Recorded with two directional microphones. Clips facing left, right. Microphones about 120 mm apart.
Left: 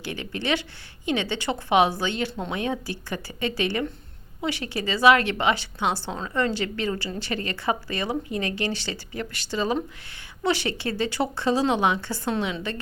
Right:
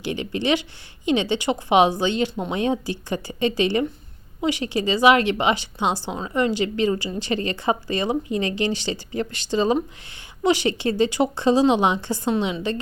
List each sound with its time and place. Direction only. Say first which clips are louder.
0.0 s a woman's voice: right 6 dB; 20° right (ahead or behind)